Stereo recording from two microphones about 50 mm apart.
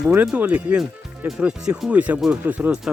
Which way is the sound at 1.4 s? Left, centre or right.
Centre.